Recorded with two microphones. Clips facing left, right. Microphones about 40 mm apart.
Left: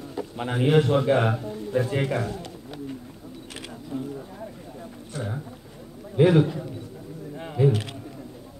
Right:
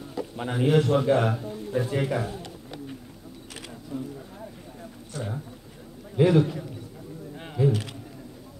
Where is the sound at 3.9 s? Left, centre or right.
Left.